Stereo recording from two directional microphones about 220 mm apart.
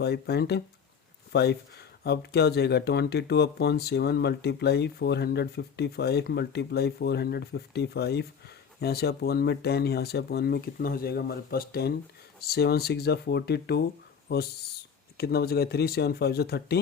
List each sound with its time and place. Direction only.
0.0 s speech: 50° left (ahead or behind)